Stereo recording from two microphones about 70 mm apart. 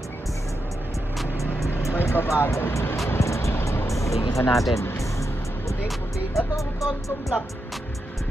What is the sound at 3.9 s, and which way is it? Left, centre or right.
Music, left.